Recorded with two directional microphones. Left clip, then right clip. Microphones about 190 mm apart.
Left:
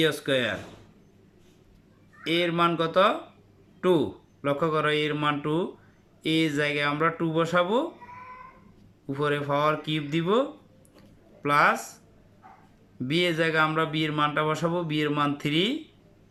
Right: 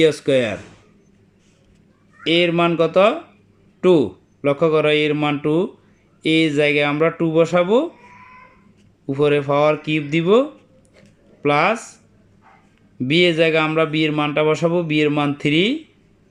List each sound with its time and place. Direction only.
0.0 s speech: 20° right (ahead or behind)
2.2 s speech: 20° right (ahead or behind)
9.0 s speech: 20° right (ahead or behind)
11.4 s speech: 20° right (ahead or behind)
13.0 s speech: 20° right (ahead or behind)